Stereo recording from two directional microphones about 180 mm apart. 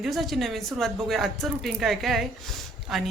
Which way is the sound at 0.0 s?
Centre (ahead or behind).